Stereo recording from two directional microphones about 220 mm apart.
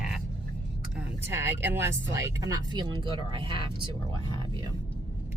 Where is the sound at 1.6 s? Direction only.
10° right (ahead or behind).